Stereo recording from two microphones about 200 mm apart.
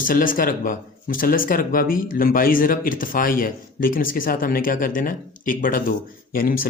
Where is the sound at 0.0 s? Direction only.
45° left (ahead or behind).